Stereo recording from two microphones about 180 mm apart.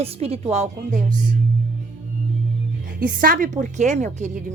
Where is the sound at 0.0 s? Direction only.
35° right (ahead or behind).